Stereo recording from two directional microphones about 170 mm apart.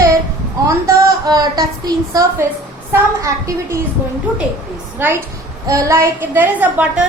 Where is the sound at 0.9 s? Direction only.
20° right (ahead or behind).